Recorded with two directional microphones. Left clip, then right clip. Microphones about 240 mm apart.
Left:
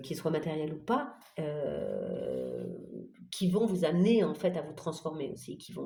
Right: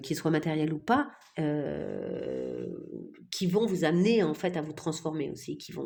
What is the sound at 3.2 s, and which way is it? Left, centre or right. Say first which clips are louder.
Speech: right 2 dB; right.